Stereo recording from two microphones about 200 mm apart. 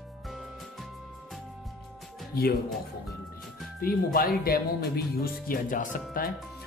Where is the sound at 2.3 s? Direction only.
50° left (ahead or behind).